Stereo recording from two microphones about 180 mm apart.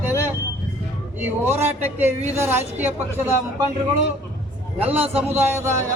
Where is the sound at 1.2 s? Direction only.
10° right (ahead or behind).